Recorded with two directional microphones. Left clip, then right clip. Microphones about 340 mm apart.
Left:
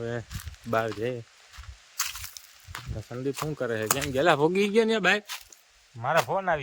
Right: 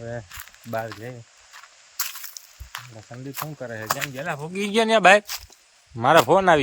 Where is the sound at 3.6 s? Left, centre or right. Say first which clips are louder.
Left 6 dB; centre.